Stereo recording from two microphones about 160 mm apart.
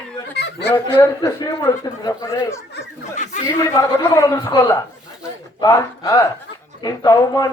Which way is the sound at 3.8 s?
15° left (ahead or behind).